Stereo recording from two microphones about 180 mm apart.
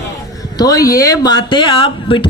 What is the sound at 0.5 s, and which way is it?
Speech, 20° left (ahead or behind).